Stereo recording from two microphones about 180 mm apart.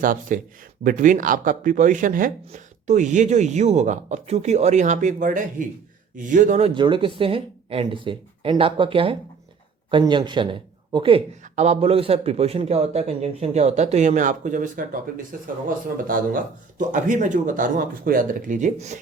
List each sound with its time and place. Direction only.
0.0 s a man's voice: 50° right (ahead or behind)
6.7 s a man's voice: 25° right (ahead or behind)